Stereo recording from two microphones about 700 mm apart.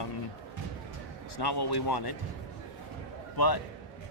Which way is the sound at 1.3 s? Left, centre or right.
Left.